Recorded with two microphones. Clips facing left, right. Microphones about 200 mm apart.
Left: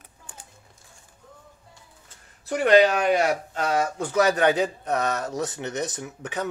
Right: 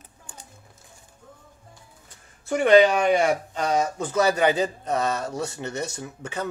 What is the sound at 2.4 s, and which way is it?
Speech, centre (ahead or behind).